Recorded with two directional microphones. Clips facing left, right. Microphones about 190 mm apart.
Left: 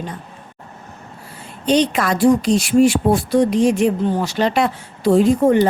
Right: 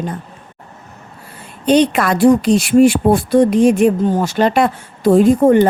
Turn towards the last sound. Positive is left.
turn(degrees=-50)  # may be behind; listen again after turning